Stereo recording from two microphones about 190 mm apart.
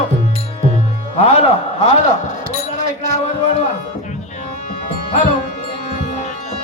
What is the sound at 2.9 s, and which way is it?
Music, 40° left (ahead or behind).